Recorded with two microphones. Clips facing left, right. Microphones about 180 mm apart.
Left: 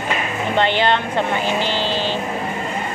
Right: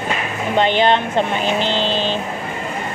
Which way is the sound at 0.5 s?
15° right (ahead or behind).